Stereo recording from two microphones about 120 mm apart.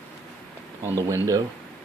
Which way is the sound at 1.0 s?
30° right (ahead or behind).